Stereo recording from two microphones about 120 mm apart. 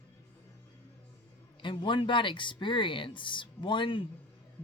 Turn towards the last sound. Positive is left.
turn(degrees=45)  # may be behind; listen again after turning